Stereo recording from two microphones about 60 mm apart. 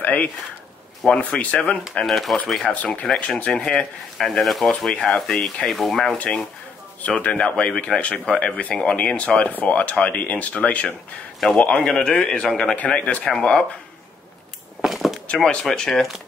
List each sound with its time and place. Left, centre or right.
0.0 s a sound: left
1.1 s speech: left
2.0 s speech: centre
2.7 s speech: left
4.2 s speech: centre
4.9 s speech: centre
6.1 s speech: left
14.8 s a sound: centre
15.6 s speech: centre